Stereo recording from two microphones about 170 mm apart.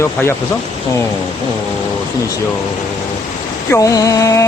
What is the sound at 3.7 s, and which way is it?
Music, 20° left (ahead or behind).